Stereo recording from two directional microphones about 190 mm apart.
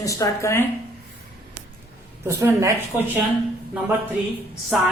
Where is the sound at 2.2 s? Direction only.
15° right (ahead or behind).